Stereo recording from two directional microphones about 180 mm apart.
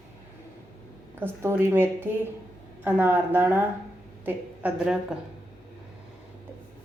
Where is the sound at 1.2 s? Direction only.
10° right (ahead or behind).